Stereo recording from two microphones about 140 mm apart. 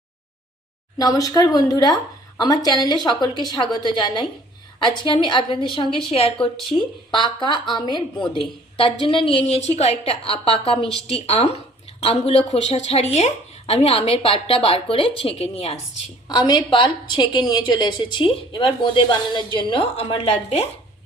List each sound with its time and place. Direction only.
0.9 s a woman's voice: 25° left (ahead or behind); by 15.8 s 45° left (ahead or behind)
16.3 s a woman's voice: 30° left (ahead or behind); by 20.7 s 45° left (ahead or behind)